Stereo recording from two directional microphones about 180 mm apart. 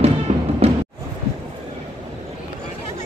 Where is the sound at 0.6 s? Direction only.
35° right (ahead or behind).